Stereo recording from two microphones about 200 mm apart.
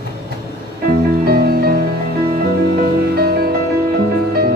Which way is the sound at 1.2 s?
50° right (ahead or behind).